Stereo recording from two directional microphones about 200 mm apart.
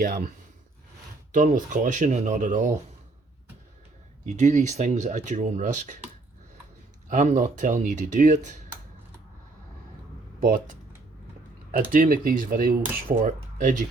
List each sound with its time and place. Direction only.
0.0 s speech: 50° right (ahead or behind)
1.3 s speech: 40° right (ahead or behind)
4.3 s speech: 35° right (ahead or behind)
7.1 s speech: 35° right (ahead or behind)
10.4 s speech: 40° right (ahead or behind)
11.9 s speech: 45° right (ahead or behind)